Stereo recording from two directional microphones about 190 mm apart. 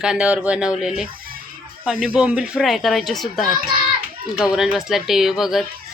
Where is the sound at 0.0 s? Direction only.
5° right (ahead or behind).